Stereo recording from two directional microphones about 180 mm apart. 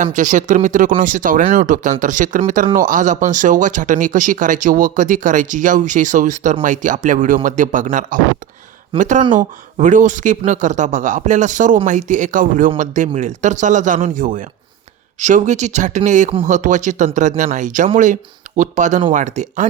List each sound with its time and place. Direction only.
0.0 s speech: 45° right (ahead or behind)